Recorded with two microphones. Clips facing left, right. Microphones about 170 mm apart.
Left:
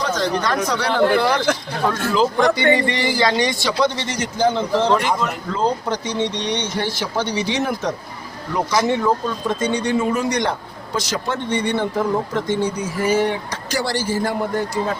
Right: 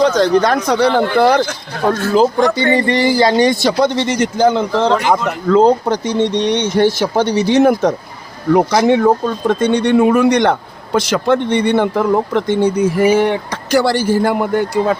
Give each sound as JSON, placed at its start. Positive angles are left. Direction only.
{"t": 0.0, "sound": "speech", "side_deg": -65}
{"t": 1.9, "sound": "speech", "side_deg": -45}
{"t": 2.6, "sound": "a sound", "side_deg": -40}
{"t": 3.3, "sound": "speech", "side_deg": -45}